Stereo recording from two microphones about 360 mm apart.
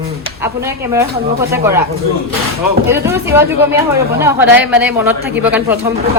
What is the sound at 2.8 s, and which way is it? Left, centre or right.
Speech, centre.